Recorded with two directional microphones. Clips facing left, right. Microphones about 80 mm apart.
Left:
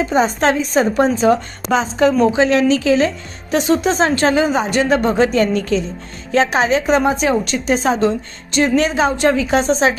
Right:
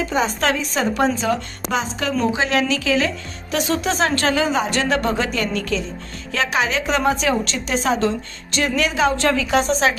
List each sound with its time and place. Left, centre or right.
0.1 s a woman's voice: left